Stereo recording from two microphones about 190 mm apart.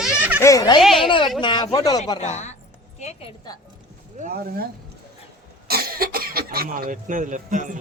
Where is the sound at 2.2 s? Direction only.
35° left (ahead or behind).